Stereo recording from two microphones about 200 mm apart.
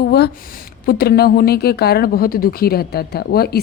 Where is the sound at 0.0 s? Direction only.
55° left (ahead or behind).